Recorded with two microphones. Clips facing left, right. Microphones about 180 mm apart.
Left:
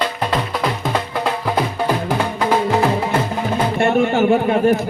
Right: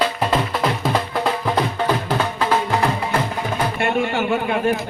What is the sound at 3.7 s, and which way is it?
Pigeon, 45° left (ahead or behind).